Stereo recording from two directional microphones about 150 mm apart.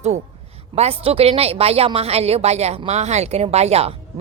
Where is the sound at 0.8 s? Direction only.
40° right (ahead or behind).